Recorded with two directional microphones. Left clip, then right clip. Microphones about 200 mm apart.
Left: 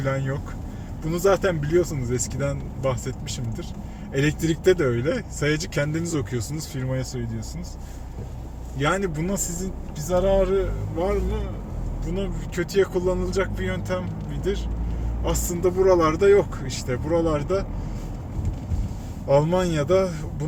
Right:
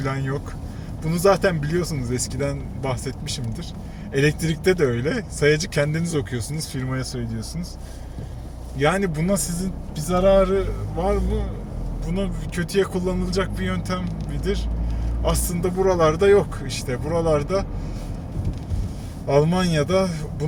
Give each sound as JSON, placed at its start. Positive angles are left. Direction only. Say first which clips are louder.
{"t": 0.0, "sound": "speech", "louder": "even", "side_deg": -20}
{"t": 6.9, "sound": "speech", "louder": "right 1 dB", "side_deg": -30}
{"t": 8.8, "sound": "speech", "louder": "right 3 dB", "side_deg": -20}
{"t": 15.2, "sound": "speech", "louder": "even", "side_deg": -20}
{"t": 19.3, "sound": "speech", "louder": "even", "side_deg": -20}